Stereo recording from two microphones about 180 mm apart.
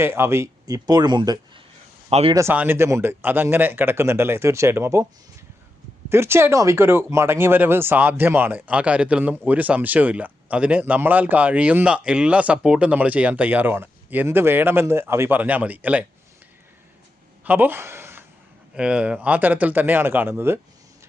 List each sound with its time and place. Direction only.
0.0 s speech: 15° right (ahead or behind)
2.0 s speech: 35° right (ahead or behind)
2.3 s speech: 15° right (ahead or behind)
6.1 s speech: 15° right (ahead or behind)
17.4 s a sound: 10° right (ahead or behind)
18.7 s speech: 5° right (ahead or behind)